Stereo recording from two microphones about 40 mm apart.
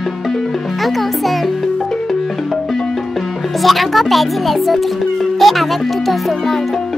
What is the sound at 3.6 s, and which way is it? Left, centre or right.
A child's voice, centre.